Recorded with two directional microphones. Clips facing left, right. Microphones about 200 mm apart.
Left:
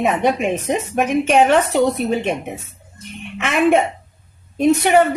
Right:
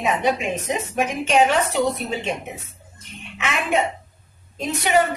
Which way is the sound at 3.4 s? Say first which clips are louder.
Left 7 dB; 55° left (ahead or behind).